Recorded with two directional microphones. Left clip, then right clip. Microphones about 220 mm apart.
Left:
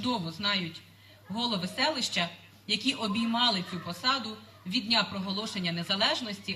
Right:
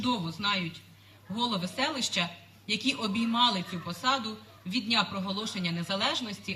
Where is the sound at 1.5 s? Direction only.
15° right (ahead or behind).